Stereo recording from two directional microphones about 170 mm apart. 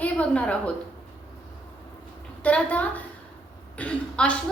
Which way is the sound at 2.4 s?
10° left (ahead or behind).